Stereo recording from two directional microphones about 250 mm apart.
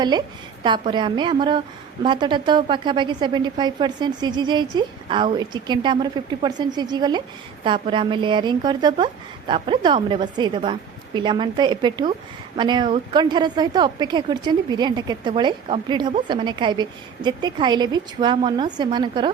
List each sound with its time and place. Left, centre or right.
0.6 s a woman's voice: centre